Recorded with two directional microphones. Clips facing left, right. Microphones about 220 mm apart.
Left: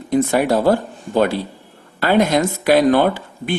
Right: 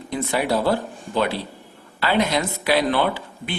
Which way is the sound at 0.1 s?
45° left (ahead or behind).